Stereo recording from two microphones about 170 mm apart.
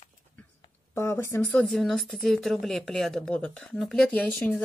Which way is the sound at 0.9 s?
15° left (ahead or behind).